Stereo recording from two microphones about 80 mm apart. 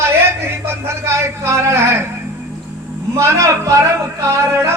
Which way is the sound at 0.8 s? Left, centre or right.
Right.